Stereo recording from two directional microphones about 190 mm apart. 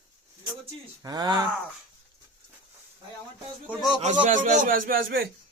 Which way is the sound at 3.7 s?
5° right (ahead or behind).